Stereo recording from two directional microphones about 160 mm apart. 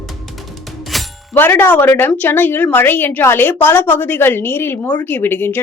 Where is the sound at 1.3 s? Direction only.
15° left (ahead or behind).